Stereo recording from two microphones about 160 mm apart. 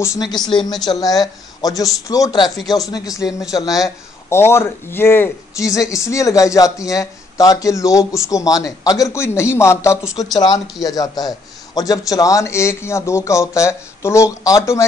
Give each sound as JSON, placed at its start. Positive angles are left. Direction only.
{"t": 0.0, "sound": "a man's voice", "side_deg": 20}